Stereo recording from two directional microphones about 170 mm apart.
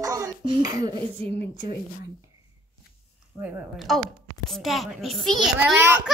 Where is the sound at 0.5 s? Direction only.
30° right (ahead or behind).